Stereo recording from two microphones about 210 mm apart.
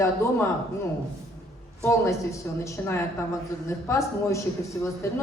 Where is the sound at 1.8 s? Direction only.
15° left (ahead or behind).